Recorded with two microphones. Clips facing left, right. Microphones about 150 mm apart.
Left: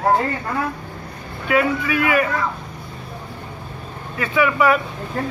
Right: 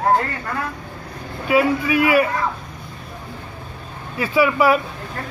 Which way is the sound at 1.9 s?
10° right (ahead or behind).